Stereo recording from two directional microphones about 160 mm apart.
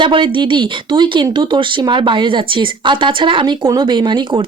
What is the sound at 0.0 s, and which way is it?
Speech, 30° right (ahead or behind).